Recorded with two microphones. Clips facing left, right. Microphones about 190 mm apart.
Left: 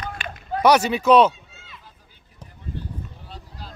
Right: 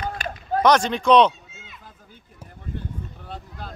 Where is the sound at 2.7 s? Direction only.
55° right (ahead or behind).